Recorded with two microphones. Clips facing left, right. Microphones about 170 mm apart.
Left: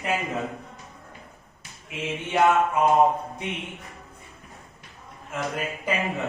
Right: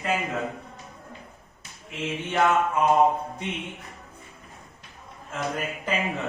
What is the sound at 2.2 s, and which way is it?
Speech, 20° left (ahead or behind).